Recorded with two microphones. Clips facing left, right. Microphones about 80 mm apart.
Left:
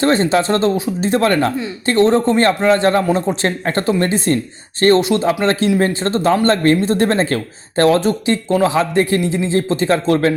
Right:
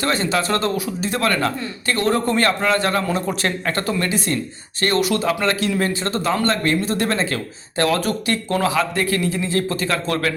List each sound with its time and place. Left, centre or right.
0.0 s a man's voice: left